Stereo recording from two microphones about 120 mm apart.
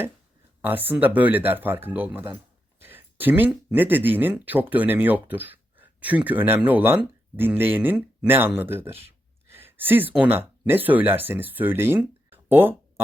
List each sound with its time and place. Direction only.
0.6 s speech: 15° right (ahead or behind)